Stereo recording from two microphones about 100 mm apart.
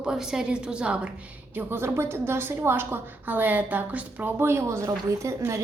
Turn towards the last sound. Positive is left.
turn(degrees=-30)  # may be behind; listen again after turning